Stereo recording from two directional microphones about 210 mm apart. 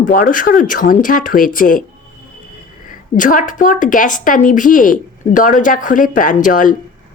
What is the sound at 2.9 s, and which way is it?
A woman's voice, 40° left (ahead or behind).